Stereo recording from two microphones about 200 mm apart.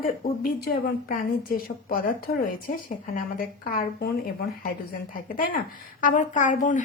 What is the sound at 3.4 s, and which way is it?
Speech, 45° left (ahead or behind).